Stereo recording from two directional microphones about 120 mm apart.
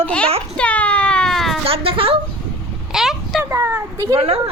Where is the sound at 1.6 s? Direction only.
50° right (ahead or behind).